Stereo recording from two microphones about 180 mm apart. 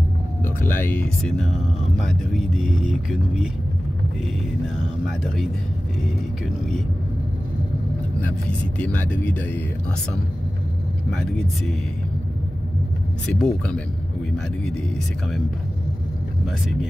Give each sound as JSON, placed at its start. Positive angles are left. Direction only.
{"t": 0.6, "sound": "speech", "side_deg": 10}
{"t": 2.3, "sound": "vehicle", "side_deg": 0}
{"t": 8.2, "sound": "speech", "side_deg": 10}
{"t": 11.1, "sound": "vehicle", "side_deg": 5}
{"t": 13.3, "sound": "vehicle", "side_deg": 5}